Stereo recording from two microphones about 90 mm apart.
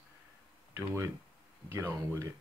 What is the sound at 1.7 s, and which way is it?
Speech, 30° right (ahead or behind).